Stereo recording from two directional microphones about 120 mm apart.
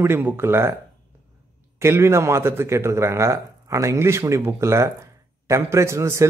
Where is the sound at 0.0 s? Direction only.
20° right (ahead or behind).